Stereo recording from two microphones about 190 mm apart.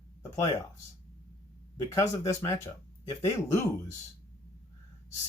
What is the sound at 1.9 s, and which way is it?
Speech, 15° left (ahead or behind).